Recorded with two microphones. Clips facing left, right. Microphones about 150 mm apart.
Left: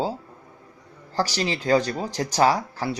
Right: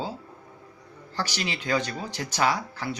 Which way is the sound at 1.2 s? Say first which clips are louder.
Left 6 dB; 35° left (ahead or behind).